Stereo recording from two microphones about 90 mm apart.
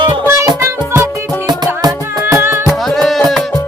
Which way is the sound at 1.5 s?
45° right (ahead or behind).